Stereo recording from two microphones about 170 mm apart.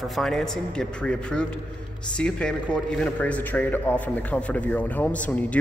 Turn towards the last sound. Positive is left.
turn(degrees=10)  # may be behind; listen again after turning